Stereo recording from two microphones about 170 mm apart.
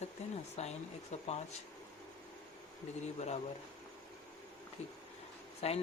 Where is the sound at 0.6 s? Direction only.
40° left (ahead or behind).